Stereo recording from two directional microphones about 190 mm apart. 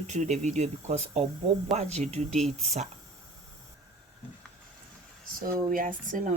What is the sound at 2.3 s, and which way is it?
Speech, centre (ahead or behind).